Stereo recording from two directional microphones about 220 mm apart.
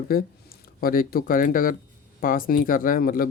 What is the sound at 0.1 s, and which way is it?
Speech, 40° left (ahead or behind).